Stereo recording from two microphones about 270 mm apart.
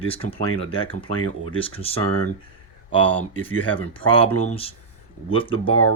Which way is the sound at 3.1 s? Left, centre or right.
Centre.